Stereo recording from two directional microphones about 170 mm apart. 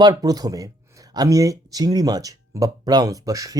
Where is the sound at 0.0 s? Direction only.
20° right (ahead or behind).